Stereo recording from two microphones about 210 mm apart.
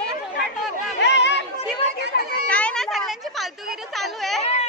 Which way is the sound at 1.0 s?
55° left (ahead or behind).